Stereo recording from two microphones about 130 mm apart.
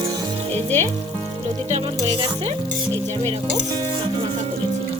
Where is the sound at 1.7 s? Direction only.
45° right (ahead or behind).